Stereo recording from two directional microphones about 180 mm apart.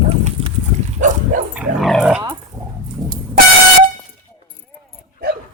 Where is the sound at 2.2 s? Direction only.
20° right (ahead or behind).